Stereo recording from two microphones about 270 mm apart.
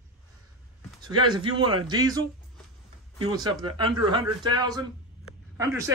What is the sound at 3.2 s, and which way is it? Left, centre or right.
A man's voice, centre.